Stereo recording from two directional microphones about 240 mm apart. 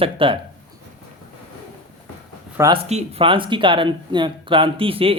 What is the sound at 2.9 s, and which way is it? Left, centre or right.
Speech, right.